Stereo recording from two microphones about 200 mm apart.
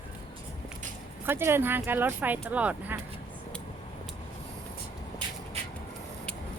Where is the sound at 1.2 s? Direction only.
10° right (ahead or behind).